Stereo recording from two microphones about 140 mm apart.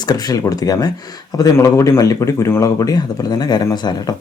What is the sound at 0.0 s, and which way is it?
Speech, 30° left (ahead or behind).